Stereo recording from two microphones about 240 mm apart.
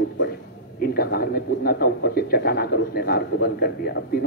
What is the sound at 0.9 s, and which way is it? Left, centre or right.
A man's voice, left.